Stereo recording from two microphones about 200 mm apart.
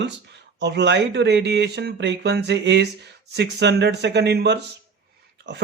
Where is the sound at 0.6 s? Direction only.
60° right (ahead or behind).